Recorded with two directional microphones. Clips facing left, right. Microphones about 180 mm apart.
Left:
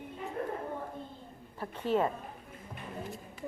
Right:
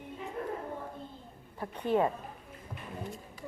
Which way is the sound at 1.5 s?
15° right (ahead or behind).